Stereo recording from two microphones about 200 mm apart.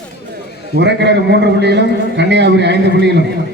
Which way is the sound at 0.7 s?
60° right (ahead or behind).